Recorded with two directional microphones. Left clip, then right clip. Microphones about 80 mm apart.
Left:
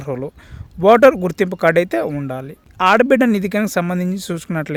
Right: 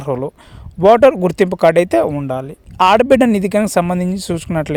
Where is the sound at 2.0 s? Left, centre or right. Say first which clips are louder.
Right 4 dB; right.